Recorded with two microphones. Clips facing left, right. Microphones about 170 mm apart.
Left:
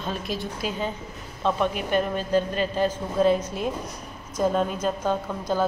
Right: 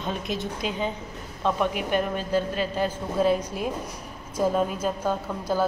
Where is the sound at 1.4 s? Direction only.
10° right (ahead or behind).